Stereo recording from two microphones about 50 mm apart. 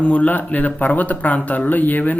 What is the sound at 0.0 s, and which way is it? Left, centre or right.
Speech, left.